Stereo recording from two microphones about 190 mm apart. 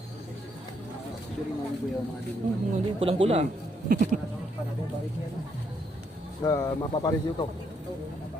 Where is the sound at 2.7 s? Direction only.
30° right (ahead or behind).